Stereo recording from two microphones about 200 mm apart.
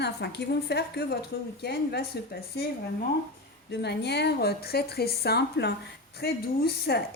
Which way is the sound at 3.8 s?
55° left (ahead or behind).